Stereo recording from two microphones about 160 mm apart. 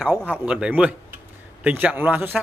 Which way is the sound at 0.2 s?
10° right (ahead or behind).